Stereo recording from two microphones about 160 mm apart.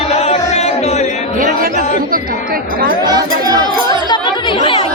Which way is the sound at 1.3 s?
60° right (ahead or behind).